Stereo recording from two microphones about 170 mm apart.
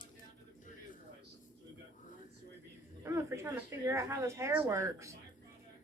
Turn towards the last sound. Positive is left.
turn(degrees=-15)  # may be behind; listen again after turning